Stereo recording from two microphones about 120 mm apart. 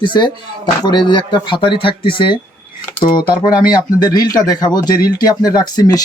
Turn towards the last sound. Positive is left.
turn(degrees=35)  # may be behind; listen again after turning